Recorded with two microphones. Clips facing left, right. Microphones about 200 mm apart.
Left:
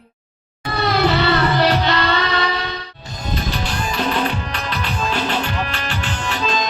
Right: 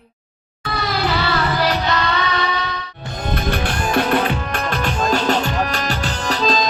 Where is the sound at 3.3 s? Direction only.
55° right (ahead or behind).